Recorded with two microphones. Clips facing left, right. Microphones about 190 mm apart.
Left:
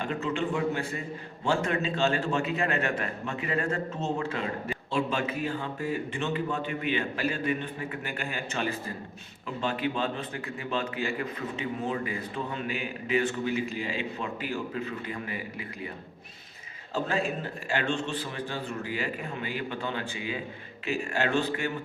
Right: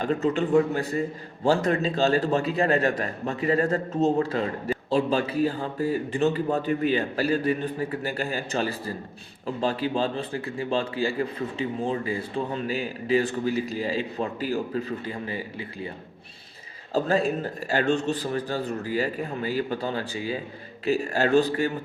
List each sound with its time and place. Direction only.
0.0 s a man's voice: 40° right (ahead or behind)
16.9 s a man's voice: 40° right (ahead or behind)